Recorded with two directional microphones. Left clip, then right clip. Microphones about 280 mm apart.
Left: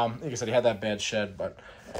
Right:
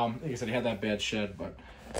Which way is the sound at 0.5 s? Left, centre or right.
Centre.